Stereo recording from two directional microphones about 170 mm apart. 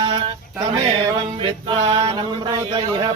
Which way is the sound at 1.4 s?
30° right (ahead or behind).